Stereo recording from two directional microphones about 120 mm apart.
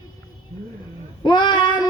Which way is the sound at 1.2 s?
40° left (ahead or behind).